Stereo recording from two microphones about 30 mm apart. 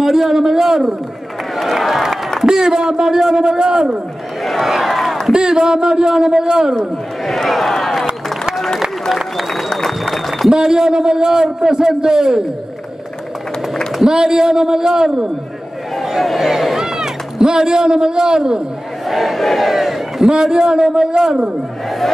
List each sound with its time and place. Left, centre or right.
0.0 s a man's voice: centre
1.6 s a man's voice: centre
2.4 s a man's voice: right
4.5 s a man's voice: centre
5.3 s a man's voice: right
6.8 s a man's voice: centre
7.8 s a sound: centre
9.5 s applause: centre
10.5 s a man's voice: right
14.0 s a man's voice: right
15.0 s a man's voice: centre
16.0 s a sound: centre; by 18.6 s right
19.0 s speech: centre
20.2 s a man's voice: right